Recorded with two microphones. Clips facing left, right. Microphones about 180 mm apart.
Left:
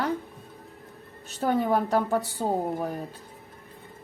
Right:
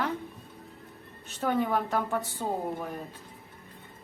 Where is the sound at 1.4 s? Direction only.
40° left (ahead or behind).